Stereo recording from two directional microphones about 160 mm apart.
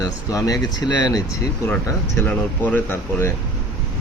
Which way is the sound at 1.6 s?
10° left (ahead or behind).